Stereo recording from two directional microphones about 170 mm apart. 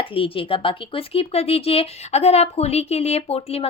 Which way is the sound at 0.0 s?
30° left (ahead or behind).